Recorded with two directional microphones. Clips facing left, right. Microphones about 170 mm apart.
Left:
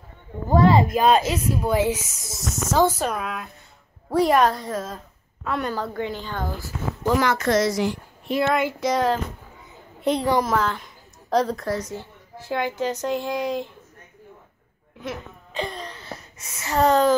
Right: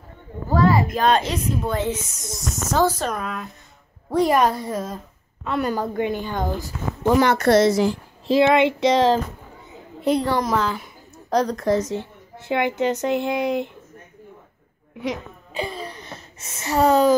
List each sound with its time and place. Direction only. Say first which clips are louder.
0.5 s a sound: left 2 dB; 25° left (ahead or behind)
0.9 s a woman's voice: left 1 dB; 5° left (ahead or behind)
5.7 s a woman's voice: right 4 dB; 15° right (ahead or behind)
10.4 s a woman's voice: right 1 dB; centre (ahead or behind)
10.8 s a sound: right 4 dB; centre (ahead or behind)
11.6 s speech: right 7 dB; 20° right (ahead or behind)
12.4 s speech: right 4 dB; 65° right (ahead or behind)
15.0 s a sound: right 5 dB; 10° right (ahead or behind); by 16.7 s 25° right (ahead or behind)
16.7 s a woman's voice: right 2 dB; 10° right (ahead or behind)